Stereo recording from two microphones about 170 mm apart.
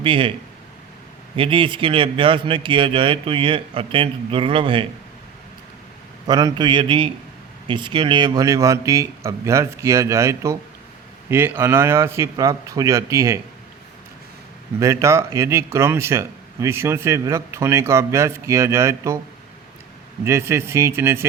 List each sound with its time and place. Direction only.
0.0 s a man's voice: 30° right (ahead or behind)
1.4 s a man's voice: 30° right (ahead or behind)
6.2 s a man's voice: 25° right (ahead or behind)
14.8 s speech: 15° right (ahead or behind)
20.2 s speech: 15° right (ahead or behind)